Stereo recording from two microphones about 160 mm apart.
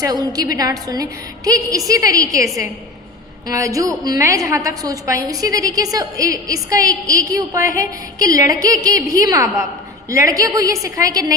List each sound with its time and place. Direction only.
0.0 s a woman's voice: 25° right (ahead or behind)